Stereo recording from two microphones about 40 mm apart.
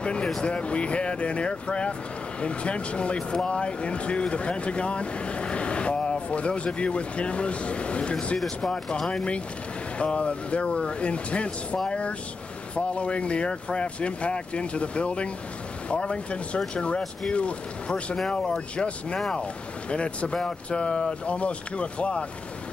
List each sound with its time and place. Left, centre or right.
0.0 s speech: left
19.1 s speech: centre
19.9 s speech: left